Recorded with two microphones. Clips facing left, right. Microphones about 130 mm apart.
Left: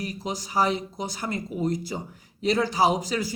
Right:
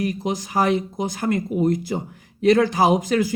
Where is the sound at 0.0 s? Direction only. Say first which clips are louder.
Right 8 dB; 50° right (ahead or behind).